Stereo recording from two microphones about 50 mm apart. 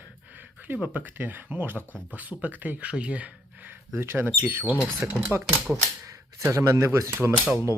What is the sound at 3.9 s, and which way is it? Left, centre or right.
Speech, right.